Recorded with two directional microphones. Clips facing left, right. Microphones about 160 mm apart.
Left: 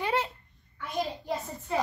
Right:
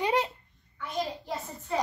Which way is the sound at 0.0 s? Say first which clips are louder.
Right 2 dB; 15° right (ahead or behind).